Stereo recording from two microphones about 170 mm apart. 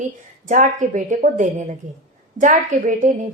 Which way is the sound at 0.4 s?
45° right (ahead or behind).